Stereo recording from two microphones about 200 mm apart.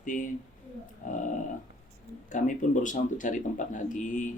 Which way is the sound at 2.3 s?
40° left (ahead or behind).